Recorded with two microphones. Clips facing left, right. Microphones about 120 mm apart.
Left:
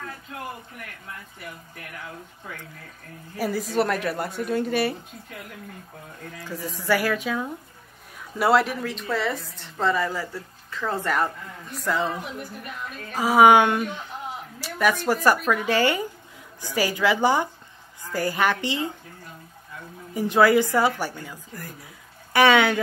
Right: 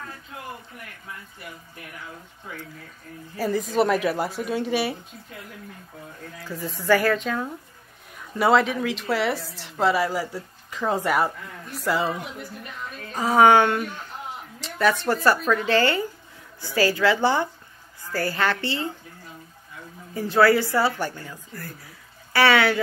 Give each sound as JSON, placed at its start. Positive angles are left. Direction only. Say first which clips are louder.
{"t": 3.3, "sound": "a woman's voice", "louder": "right 2 dB", "side_deg": 10}
{"t": 3.6, "sound": "a woman's voice", "louder": "right 3 dB", "side_deg": 0}
{"t": 6.5, "sound": "a woman's voice", "louder": "right 3 dB", "side_deg": 15}
{"t": 11.6, "sound": "a woman's voice", "louder": "right 1 dB", "side_deg": 0}
{"t": 13.1, "sound": "a woman's voice", "louder": "left 1 dB", "side_deg": 10}
{"t": 20.2, "sound": "a woman's voice", "louder": "even", "side_deg": 15}
{"t": 22.3, "sound": "a sound", "louder": "left 1 dB", "side_deg": 20}